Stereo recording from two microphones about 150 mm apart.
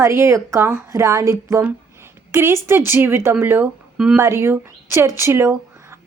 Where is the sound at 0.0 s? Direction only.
15° right (ahead or behind).